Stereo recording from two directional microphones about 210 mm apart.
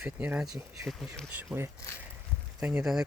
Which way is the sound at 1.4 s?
10° right (ahead or behind).